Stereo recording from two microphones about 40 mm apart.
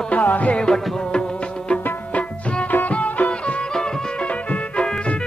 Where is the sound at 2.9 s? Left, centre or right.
Left.